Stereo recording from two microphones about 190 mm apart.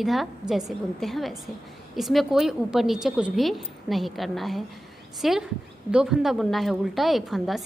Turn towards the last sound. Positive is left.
turn(degrees=0)  # may be behind; listen again after turning